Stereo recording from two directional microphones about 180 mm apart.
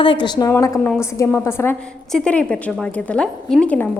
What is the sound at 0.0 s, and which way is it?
A woman's voice, 25° left (ahead or behind).